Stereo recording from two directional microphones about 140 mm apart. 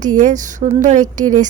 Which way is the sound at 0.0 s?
65° right (ahead or behind).